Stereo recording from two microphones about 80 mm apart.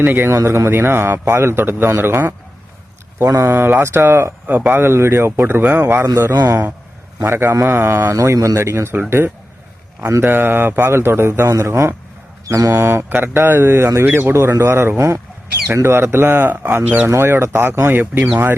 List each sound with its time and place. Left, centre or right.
0.0 s a man's voice: right
3.2 s speech: right
3.5 s a man's voice: right
4.4 s a man's voice: right
17.1 s a man's voice: right